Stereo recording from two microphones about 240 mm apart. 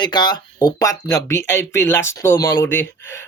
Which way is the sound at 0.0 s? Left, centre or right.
Centre.